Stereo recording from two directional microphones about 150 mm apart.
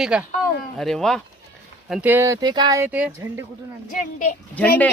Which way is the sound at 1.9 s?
10° right (ahead or behind).